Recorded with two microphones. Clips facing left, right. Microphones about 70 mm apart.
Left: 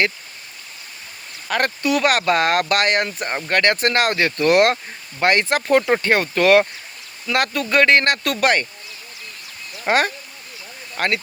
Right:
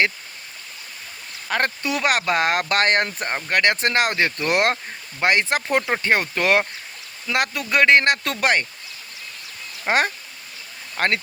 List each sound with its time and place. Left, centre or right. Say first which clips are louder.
1.5 s speech: left 3 dB; right
3.5 s speech: left 2 dB; centre
9.9 s speech: left 2 dB; right
10.9 s speech: even; right